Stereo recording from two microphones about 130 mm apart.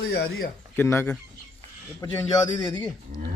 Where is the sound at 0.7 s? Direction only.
20° left (ahead or behind).